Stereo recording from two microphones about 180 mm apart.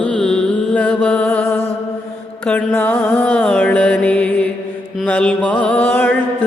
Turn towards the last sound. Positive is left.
turn(degrees=10)  # may be behind; listen again after turning